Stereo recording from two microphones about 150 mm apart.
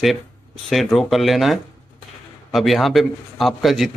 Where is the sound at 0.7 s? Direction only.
Centre (ahead or behind).